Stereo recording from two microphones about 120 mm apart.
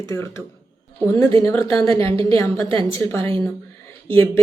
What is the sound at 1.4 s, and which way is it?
A woman's voice, 20° left (ahead or behind).